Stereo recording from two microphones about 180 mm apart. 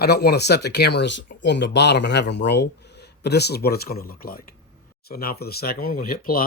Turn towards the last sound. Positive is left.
turn(degrees=55)  # may be behind; listen again after turning